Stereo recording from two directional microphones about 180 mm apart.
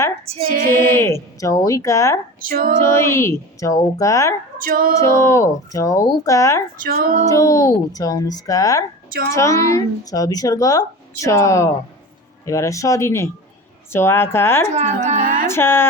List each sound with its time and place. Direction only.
0.7 s speech: 15° left (ahead or behind)
2.4 s speech: 55° right (ahead or behind)
2.8 s speech: 15° left (ahead or behind)
4.5 s female singing: 50° right (ahead or behind)
5.1 s speech: 15° left (ahead or behind)
6.8 s female singing: 55° right (ahead or behind)
7.3 s speech: 20° left (ahead or behind)
9.0 s a woman's voice: 55° right (ahead or behind)
9.3 s speech: 15° left (ahead or behind)
14.7 s speech: 40° right (ahead or behind)
15.4 s speech: 15° left (ahead or behind)